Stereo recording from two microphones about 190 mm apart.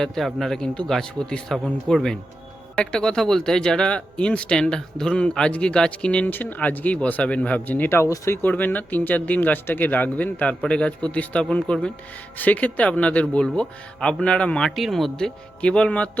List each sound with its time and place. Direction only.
0.0 s speech: centre (ahead or behind)